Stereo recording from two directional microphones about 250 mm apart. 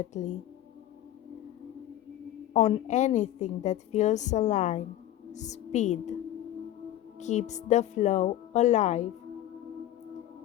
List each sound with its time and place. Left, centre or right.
0.1 s a woman's voice: left
2.5 s a woman's voice: left
7.2 s a woman's voice: left